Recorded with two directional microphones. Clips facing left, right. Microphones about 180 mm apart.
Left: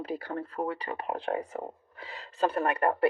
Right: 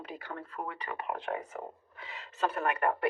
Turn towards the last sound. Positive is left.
turn(degrees=35)  # may be behind; listen again after turning